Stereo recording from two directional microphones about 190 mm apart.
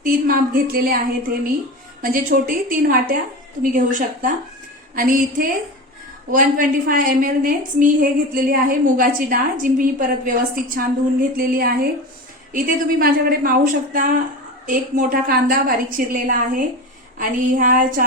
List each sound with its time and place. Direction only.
0.0 s a woman's voice: 50° right (ahead or behind)